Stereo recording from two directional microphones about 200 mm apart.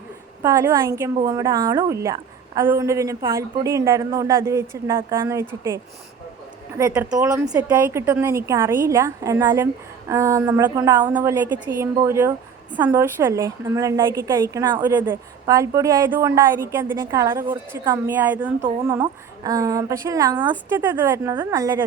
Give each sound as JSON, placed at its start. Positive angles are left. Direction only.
{"t": 0.4, "sound": "a woman's voice", "side_deg": -15}